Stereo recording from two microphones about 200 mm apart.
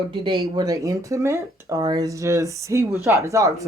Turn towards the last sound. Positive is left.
turn(degrees=-15)  # may be behind; listen again after turning